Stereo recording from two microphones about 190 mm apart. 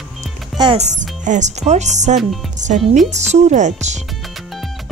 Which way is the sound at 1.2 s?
40° right (ahead or behind).